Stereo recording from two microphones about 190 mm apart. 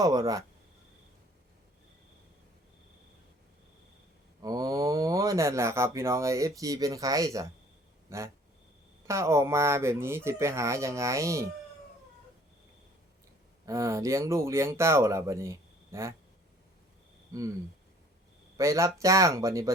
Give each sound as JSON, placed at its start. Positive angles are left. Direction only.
{"t": 0.0, "sound": "speech", "side_deg": -20}
{"t": 4.4, "sound": "speech", "side_deg": -20}
{"t": 8.1, "sound": "a sound", "side_deg": -15}
{"t": 9.0, "sound": "speech", "side_deg": -15}
{"t": 13.7, "sound": "speech", "side_deg": -15}
{"t": 17.3, "sound": "speech", "side_deg": -15}
{"t": 18.5, "sound": "speech", "side_deg": -15}